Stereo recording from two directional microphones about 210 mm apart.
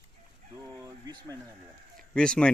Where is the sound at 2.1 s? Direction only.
5° left (ahead or behind).